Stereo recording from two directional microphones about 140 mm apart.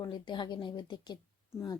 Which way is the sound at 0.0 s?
35° left (ahead or behind).